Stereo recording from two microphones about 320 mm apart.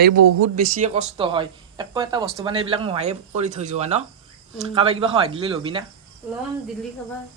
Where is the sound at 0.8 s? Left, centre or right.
Right.